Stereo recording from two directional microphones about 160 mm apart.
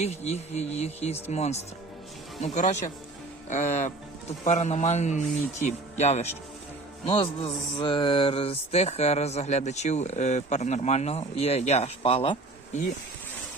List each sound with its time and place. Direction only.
0.0 s speech: 45° left (ahead or behind)
7.0 s music: 35° left (ahead or behind)